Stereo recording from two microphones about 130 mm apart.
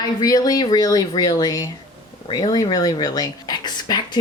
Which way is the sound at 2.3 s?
30° left (ahead or behind).